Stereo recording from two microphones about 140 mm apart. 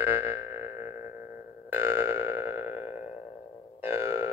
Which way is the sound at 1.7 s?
15° right (ahead or behind).